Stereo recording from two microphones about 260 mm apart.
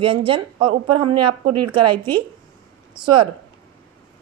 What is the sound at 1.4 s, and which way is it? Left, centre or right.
Speech, right.